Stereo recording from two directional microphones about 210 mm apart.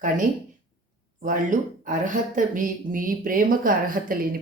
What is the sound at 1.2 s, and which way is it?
Speech, 40° right (ahead or behind).